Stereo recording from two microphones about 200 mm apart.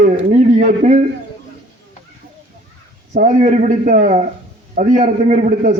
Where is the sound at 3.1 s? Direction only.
40° right (ahead or behind).